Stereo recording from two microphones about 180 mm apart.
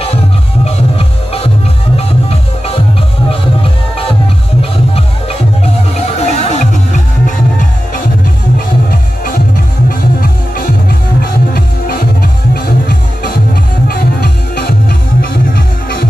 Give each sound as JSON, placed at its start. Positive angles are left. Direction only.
{"t": 0.7, "sound": "music", "side_deg": 35}
{"t": 5.9, "sound": "music", "side_deg": 40}
{"t": 9.8, "sound": "music", "side_deg": 50}